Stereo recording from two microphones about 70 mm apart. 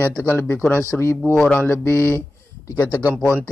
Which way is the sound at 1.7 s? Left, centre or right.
Left.